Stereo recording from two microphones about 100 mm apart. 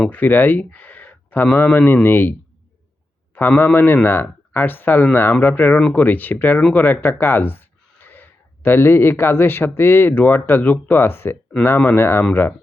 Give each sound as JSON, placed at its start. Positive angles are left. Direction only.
{"t": 0.1, "sound": "speech", "side_deg": 20}
{"t": 3.3, "sound": "speech", "side_deg": 20}
{"t": 6.8, "sound": "speech", "side_deg": 20}